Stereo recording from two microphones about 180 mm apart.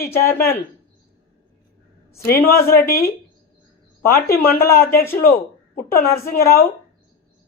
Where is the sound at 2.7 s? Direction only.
55° left (ahead or behind).